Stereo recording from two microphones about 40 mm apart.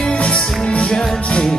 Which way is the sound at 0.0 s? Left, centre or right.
Left.